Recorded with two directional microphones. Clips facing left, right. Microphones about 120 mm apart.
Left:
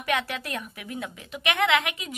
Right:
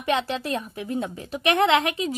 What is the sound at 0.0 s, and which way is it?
Speech, 25° right (ahead or behind).